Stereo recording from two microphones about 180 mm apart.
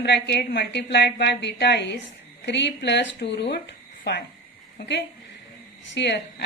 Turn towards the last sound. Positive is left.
turn(degrees=70)  # may be behind; listen again after turning